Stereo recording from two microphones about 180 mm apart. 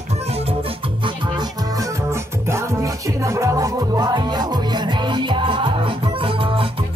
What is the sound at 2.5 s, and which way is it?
Music, 15° right (ahead or behind).